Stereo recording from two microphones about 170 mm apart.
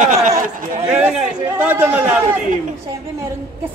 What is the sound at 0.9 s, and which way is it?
Chatter, 5° right (ahead or behind).